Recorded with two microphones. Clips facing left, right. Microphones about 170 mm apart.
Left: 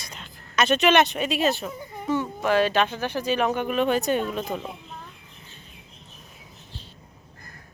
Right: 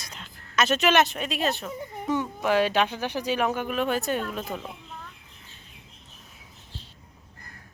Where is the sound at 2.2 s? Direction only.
10° right (ahead or behind).